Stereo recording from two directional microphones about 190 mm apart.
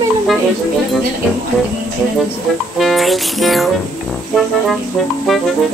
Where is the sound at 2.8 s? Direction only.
Centre (ahead or behind).